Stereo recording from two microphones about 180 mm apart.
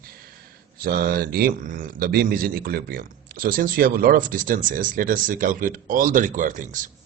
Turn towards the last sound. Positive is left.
turn(degrees=-45)  # may be behind; listen again after turning